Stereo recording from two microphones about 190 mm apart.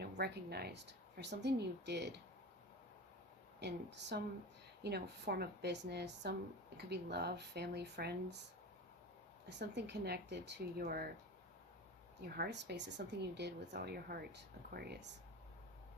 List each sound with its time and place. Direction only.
0.0 s a woman's voice: 60° right (ahead or behind)
3.6 s a woman's voice: 65° right (ahead or behind)
9.5 s a woman's voice: 65° right (ahead or behind)
12.2 s a woman's voice: 60° right (ahead or behind)